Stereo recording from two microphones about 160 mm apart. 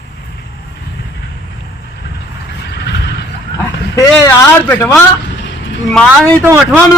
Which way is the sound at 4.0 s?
15° left (ahead or behind).